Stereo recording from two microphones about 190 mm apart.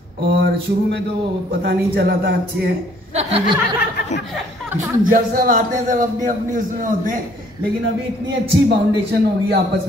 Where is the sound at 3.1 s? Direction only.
35° right (ahead or behind).